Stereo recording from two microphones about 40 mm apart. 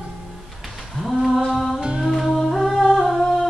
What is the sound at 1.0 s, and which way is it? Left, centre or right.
Mantra, centre.